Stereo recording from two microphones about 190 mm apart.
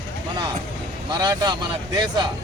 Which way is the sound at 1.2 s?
20° right (ahead or behind).